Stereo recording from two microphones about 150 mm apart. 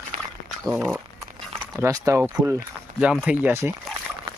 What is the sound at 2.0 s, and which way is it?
Speech, 20° right (ahead or behind).